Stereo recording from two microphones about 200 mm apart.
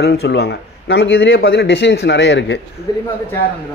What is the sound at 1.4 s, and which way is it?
Speech, 55° left (ahead or behind).